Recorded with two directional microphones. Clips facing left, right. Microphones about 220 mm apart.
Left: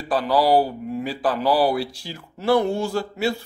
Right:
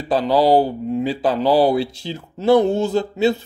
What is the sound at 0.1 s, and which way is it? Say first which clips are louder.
Speech: right 3 dB; 25° right (ahead or behind).